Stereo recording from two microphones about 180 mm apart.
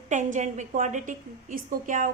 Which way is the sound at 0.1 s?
40° right (ahead or behind).